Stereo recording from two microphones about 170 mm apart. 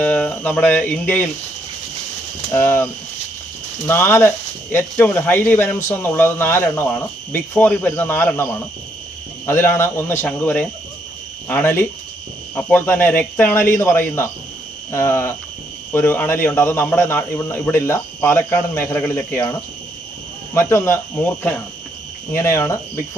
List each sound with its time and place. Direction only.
0.0 s speech: 10° left (ahead or behind)
2.5 s speech: 15° left (ahead or behind)
20.5 s speech: 15° left (ahead or behind)